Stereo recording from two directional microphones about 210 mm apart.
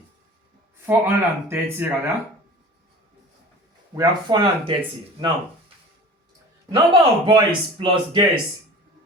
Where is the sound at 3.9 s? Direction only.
20° right (ahead or behind).